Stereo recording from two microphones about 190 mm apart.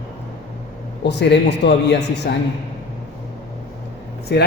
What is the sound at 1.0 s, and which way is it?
A woman's voice, 65° left (ahead or behind).